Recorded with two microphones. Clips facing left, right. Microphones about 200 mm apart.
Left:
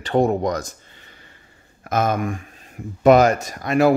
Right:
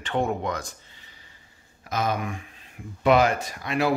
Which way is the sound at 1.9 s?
50° left (ahead or behind).